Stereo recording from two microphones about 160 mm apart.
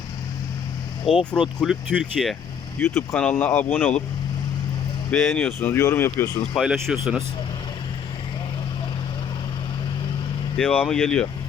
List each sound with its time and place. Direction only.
1.0 s speech: 35° left (ahead or behind)
1.6 s speech: centre (ahead or behind)
2.7 s speech: 15° left (ahead or behind)
5.1 s speech: 5° left (ahead or behind)
5.5 s speech: 15° left (ahead or behind)
6.5 s speech: centre (ahead or behind)
10.6 s speech: 10° left (ahead or behind)